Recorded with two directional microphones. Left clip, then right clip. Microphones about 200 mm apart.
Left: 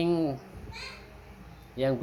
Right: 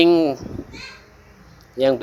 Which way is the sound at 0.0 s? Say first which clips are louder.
Right 13 dB; 30° right (ahead or behind).